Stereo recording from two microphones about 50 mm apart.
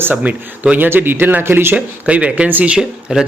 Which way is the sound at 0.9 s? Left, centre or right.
Right.